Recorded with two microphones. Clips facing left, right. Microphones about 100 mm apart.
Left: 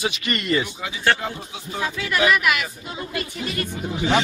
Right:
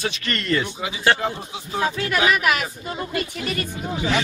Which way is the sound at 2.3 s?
45° right (ahead or behind).